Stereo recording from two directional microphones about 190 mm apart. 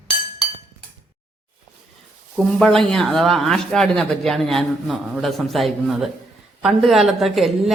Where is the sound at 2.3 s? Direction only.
Centre (ahead or behind).